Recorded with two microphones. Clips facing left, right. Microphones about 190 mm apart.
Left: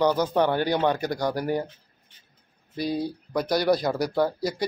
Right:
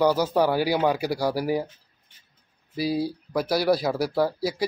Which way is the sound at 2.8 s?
5° right (ahead or behind).